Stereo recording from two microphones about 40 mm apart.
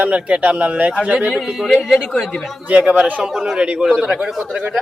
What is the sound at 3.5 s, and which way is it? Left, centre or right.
Speech, right.